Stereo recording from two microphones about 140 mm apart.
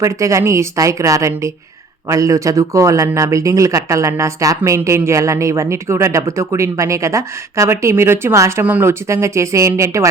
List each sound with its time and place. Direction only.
0.0 s speech: 20° right (ahead or behind)